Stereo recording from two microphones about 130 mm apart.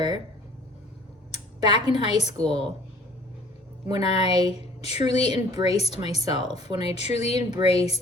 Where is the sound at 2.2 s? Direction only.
55° left (ahead or behind).